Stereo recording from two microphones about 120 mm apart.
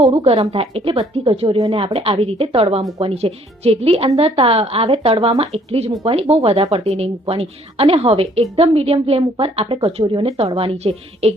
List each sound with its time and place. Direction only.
0.0 s a woman's voice: 60° right (ahead or behind)